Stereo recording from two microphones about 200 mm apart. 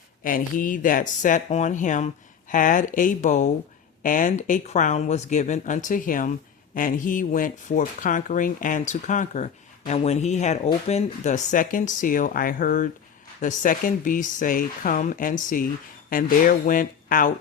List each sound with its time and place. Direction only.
0.2 s speech: 45° left (ahead or behind)